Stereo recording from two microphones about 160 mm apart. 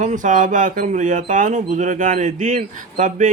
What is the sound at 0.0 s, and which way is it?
Speech, 55° right (ahead or behind).